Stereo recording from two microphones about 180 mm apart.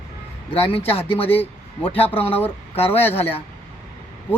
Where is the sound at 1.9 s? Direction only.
30° left (ahead or behind).